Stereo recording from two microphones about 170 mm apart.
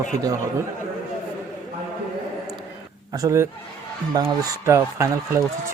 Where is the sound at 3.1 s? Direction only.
20° right (ahead or behind).